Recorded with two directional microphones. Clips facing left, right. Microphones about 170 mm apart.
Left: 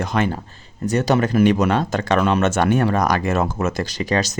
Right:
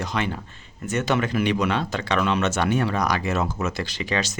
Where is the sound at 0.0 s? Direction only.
50° left (ahead or behind).